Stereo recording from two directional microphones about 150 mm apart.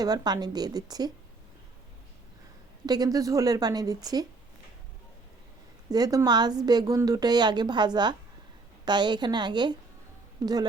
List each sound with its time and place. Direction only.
0.0 s a woman's voice: 25° right (ahead or behind)
2.8 s a woman's voice: 25° right (ahead or behind)
5.9 s a woman's voice: 25° right (ahead or behind)